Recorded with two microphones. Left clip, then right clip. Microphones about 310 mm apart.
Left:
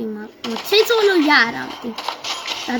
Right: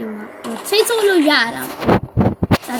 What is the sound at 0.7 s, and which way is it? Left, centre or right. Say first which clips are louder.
Speech: even; centre.